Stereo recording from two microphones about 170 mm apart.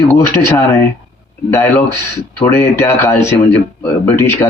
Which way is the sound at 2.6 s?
15° left (ahead or behind).